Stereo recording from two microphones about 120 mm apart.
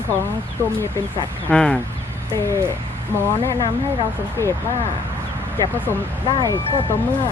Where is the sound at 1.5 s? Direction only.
10° left (ahead or behind).